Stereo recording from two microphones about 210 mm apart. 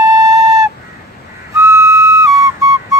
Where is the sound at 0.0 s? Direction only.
15° right (ahead or behind).